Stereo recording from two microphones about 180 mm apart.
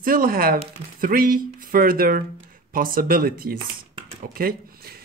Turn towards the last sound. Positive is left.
turn(degrees=-55)  # may be behind; listen again after turning